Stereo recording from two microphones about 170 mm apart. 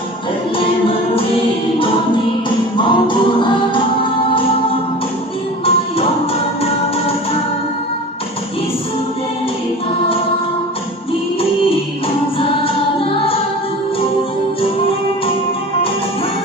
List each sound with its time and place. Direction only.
0.5 s music: 30° left (ahead or behind)
2.7 s music: 30° left (ahead or behind)